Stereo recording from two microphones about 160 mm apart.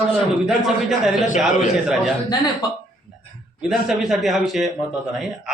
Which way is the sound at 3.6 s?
5° right (ahead or behind).